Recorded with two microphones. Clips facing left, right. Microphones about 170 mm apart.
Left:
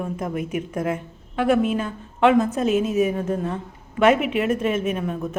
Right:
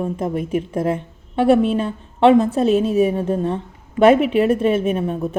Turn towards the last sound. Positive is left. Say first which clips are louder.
# right 5 dB
turn(degrees=-35)  # may be behind; listen again after turning